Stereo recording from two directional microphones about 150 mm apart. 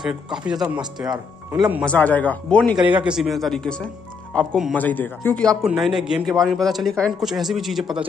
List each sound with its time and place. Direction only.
0.5 s speech: 25° right (ahead or behind)
1.9 s a man's voice: 10° left (ahead or behind)
2.8 s a man's voice: 10° right (ahead or behind)